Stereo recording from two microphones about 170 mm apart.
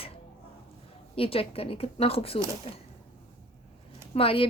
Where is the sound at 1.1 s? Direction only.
35° left (ahead or behind).